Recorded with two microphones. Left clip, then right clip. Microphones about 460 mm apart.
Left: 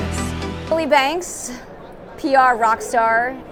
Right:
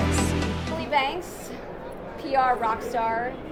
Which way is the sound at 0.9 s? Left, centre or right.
Left.